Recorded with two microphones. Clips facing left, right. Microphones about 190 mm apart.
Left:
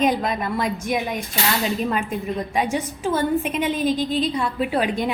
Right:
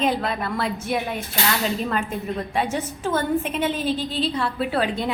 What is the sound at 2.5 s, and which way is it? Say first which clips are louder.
A woman's voice: left 2 dB; 10° left (ahead or behind).